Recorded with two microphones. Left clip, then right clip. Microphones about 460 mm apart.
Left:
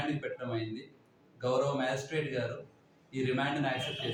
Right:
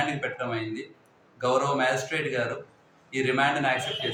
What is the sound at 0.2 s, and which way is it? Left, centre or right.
A man's voice, left.